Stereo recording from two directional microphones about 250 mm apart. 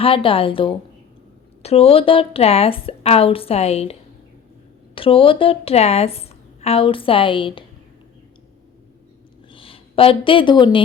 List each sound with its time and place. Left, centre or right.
0.0 s a woman's voice: left
4.9 s a woman's voice: left
9.5 s speech: left